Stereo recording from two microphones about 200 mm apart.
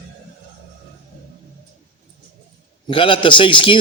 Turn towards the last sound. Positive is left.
turn(degrees=25)  # may be behind; listen again after turning